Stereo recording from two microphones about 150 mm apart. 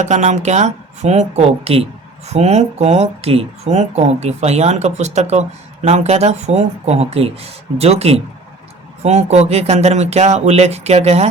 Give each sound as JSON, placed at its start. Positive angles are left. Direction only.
{"t": 0.0, "sound": "speech", "side_deg": -50}